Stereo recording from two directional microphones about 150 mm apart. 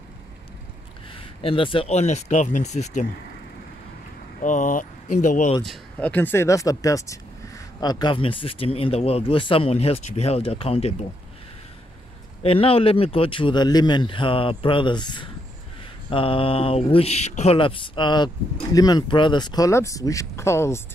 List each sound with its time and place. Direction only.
1.1 s speech: 35° left (ahead or behind)
4.4 s speech: 60° left (ahead or behind)
5.6 s speech: 5° left (ahead or behind); by 11.1 s 45° left (ahead or behind)
12.4 s speech: 40° left (ahead or behind); by 20.8 s 20° left (ahead or behind)